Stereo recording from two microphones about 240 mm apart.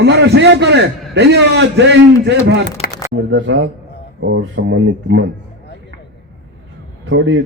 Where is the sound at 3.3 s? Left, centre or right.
Right.